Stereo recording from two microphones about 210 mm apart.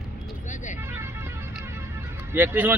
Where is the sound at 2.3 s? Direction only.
10° right (ahead or behind).